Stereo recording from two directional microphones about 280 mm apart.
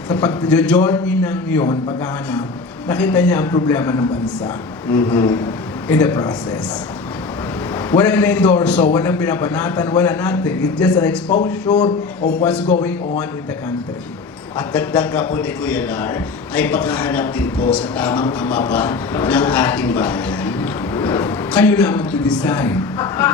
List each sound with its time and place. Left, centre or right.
0.1 s a man's voice: centre
2.8 s a man's voice: centre
7.9 s a man's voice: centre
12.5 s a man's voice: centre
14.5 s a man's voice: centre